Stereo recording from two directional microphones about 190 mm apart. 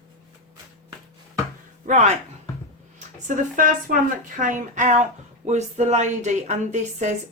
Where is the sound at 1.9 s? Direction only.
40° right (ahead or behind).